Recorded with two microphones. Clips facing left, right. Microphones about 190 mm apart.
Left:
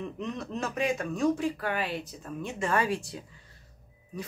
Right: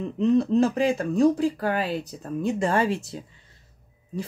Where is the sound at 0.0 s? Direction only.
30° right (ahead or behind).